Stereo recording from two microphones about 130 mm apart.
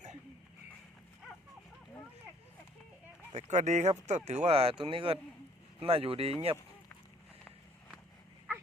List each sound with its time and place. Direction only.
3.3 s speech: 65° right (ahead or behind)